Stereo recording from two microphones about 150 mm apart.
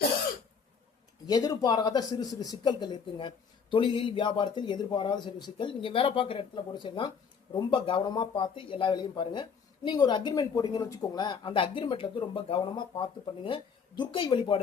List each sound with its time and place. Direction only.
1.3 s speech: 25° left (ahead or behind)